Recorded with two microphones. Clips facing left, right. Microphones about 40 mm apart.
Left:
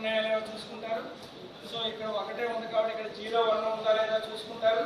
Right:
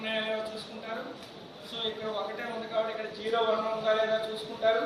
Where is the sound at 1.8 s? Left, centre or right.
Left.